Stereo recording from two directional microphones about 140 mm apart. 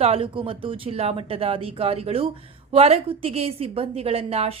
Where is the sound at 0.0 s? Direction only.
45° right (ahead or behind).